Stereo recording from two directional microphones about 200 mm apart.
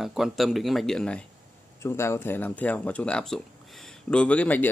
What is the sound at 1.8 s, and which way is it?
Speech, 15° left (ahead or behind).